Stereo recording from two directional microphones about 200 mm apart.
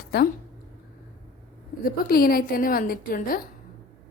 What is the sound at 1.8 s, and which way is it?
A woman's voice, 50° left (ahead or behind).